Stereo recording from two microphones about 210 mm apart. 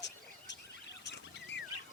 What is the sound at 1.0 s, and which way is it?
Rodents, 55° left (ahead or behind).